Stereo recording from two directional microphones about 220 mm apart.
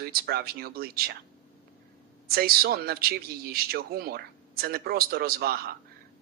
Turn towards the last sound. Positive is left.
turn(degrees=-45)  # may be behind; listen again after turning